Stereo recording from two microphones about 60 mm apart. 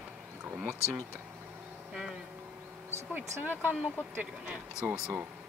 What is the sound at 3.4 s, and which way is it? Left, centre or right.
Speech, right.